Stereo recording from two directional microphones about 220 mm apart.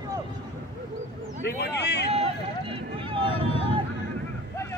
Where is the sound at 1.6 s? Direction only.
50° left (ahead or behind).